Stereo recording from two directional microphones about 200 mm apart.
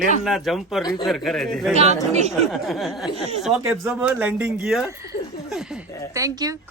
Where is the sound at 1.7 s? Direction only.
35° right (ahead or behind).